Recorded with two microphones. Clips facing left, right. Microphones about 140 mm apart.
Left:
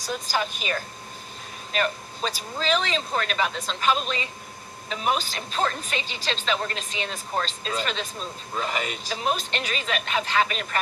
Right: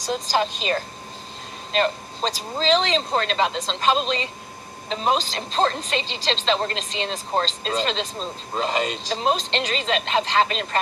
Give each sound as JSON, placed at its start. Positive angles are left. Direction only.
{"t": 0.0, "sound": "a woman's voice", "side_deg": -35}